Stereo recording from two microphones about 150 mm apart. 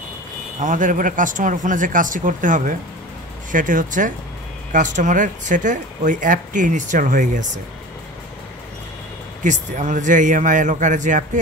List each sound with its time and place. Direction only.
0.6 s speech: 55° right (ahead or behind)
9.4 s speech: 55° right (ahead or behind)